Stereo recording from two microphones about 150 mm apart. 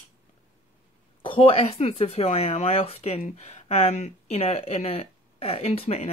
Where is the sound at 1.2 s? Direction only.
35° left (ahead or behind).